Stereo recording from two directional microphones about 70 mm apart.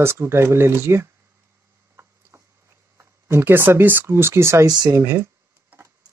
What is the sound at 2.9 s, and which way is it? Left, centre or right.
Speech, right.